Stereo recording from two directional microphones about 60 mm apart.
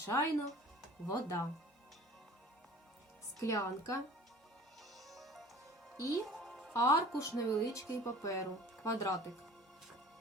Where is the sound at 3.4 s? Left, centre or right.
Left.